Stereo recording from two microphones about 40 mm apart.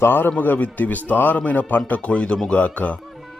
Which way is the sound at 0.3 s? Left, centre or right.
Left.